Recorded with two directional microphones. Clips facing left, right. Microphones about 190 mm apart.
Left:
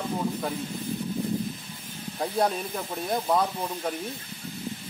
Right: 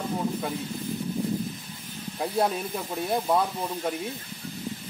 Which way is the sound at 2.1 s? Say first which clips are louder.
Even; 5° right (ahead or behind).